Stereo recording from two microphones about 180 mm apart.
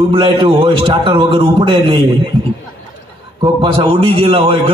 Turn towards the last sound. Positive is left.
turn(degrees=-30)  # may be behind; listen again after turning